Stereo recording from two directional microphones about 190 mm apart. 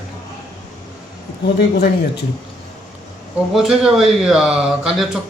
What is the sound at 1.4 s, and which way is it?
Speech, 60° left (ahead or behind).